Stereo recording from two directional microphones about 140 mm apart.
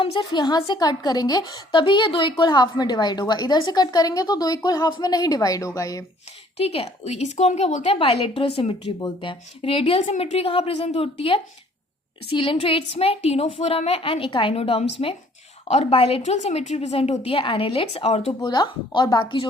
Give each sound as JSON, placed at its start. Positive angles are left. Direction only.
{"t": 0.0, "sound": "a woman's voice", "side_deg": 35}
{"t": 6.6, "sound": "a woman's voice", "side_deg": 45}
{"t": 18.3, "sound": "speech", "side_deg": 30}